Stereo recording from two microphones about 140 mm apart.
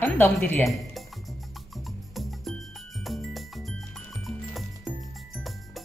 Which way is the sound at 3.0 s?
Centre (ahead or behind).